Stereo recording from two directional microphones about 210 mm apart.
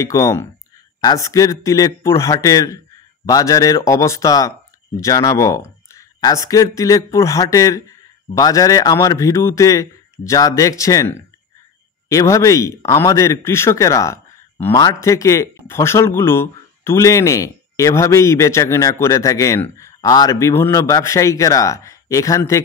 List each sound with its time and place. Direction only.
0.0 s speech: 15° left (ahead or behind)